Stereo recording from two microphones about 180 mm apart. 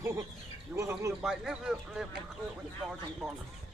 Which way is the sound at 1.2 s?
5° right (ahead or behind).